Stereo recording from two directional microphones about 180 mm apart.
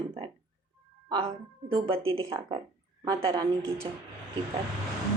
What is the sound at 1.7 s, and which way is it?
Speech, 30° right (ahead or behind).